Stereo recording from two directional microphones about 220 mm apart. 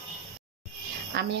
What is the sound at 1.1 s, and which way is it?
Speech, 50° right (ahead or behind).